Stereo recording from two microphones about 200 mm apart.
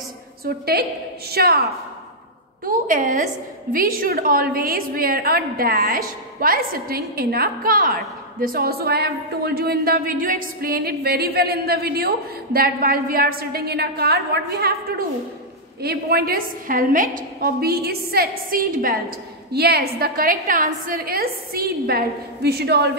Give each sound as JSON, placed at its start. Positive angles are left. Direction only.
{"t": 1.3, "sound": "a woman's voice", "side_deg": -50}